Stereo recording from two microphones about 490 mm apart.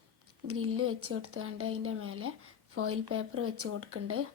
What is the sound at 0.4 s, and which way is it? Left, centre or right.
Speech, right.